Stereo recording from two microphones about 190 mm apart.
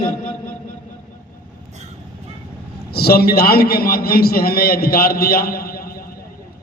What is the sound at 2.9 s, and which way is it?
A man's voice, 55° left (ahead or behind).